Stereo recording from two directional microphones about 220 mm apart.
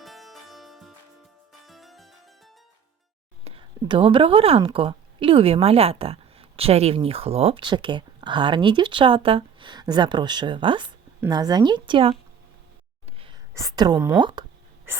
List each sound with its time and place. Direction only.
0.0 s music: centre (ahead or behind)
1.6 s harpsichord: centre (ahead or behind)
3.4 s a woman's voice: 25° right (ahead or behind)
13.1 s a sound: 25° right (ahead or behind)
13.5 s speech: 15° right (ahead or behind)